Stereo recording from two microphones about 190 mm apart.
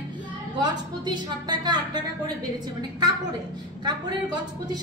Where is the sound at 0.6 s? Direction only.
20° right (ahead or behind).